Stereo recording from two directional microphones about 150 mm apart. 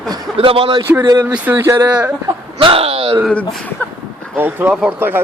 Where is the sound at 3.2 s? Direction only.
5° left (ahead or behind).